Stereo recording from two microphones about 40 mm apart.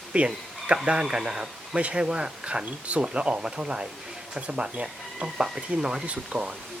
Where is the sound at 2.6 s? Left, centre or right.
Right.